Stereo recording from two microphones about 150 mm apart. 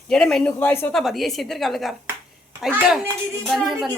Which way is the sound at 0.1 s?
5° left (ahead or behind).